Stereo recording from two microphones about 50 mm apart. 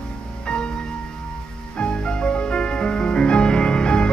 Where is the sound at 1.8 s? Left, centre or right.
Centre.